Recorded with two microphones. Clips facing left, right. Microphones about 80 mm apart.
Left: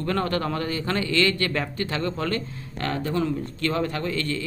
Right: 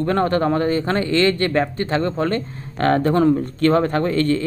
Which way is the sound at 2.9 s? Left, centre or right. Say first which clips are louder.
Right 10 dB; right.